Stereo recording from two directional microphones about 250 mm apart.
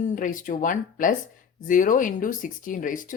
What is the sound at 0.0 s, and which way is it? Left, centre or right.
A woman's voice, left.